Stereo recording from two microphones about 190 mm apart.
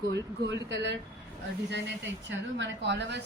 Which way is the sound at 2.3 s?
70° right (ahead or behind).